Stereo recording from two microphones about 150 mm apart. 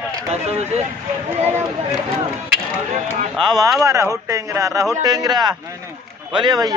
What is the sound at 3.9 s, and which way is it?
A man's voice, 20° right (ahead or behind).